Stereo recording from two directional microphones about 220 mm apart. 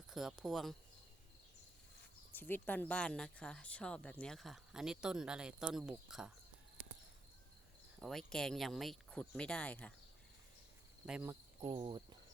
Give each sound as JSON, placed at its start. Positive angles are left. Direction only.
{"t": 0.1, "sound": "speech", "side_deg": 0}
{"t": 2.3, "sound": "speech", "side_deg": 10}
{"t": 7.9, "sound": "speech", "side_deg": 0}
{"t": 11.0, "sound": "speech", "side_deg": -5}
{"t": 11.6, "sound": "cricket", "side_deg": -25}